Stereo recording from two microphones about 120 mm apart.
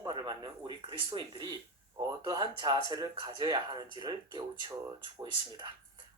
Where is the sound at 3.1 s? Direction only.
45° right (ahead or behind).